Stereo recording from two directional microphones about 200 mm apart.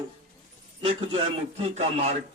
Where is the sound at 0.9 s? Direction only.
25° right (ahead or behind).